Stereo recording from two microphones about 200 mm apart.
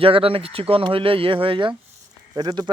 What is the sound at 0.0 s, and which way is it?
Speech, 25° right (ahead or behind).